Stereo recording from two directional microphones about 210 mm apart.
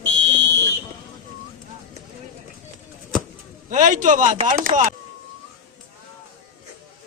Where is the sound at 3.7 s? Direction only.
35° right (ahead or behind).